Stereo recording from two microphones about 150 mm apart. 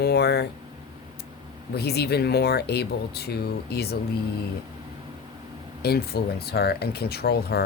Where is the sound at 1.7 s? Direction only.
90° left.